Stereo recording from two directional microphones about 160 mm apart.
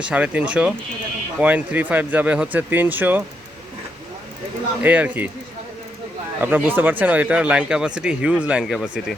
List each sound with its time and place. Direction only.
0.0 s speech: 10° right (ahead or behind)
4.8 s speech: 10° right (ahead or behind)
6.4 s speech: 10° right (ahead or behind)